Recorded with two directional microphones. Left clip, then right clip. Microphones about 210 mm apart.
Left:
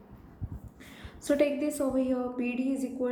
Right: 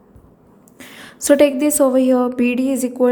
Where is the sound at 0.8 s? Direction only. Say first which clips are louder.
Right 18 dB; 50° right (ahead or behind).